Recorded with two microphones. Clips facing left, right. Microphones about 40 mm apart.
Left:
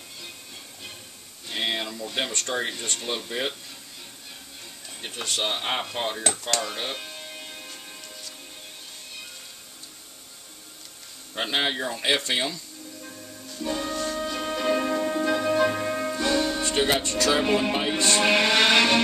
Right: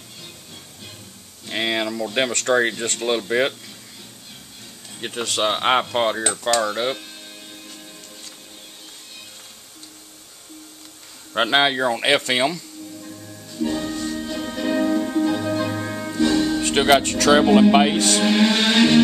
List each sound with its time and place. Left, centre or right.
1.5 s a sound: right
2.1 s speech: right
5.0 s speech: right
6.6 s speech: right
11.3 s speech: right
13.6 s music: centre
16.6 s speech: right
18.2 s mantra: left